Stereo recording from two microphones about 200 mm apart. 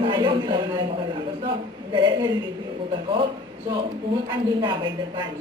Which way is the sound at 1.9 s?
20° right (ahead or behind).